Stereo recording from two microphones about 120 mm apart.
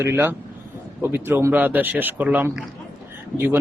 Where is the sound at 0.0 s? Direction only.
20° right (ahead or behind).